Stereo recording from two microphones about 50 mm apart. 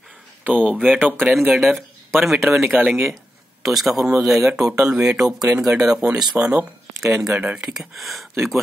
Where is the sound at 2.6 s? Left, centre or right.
Right.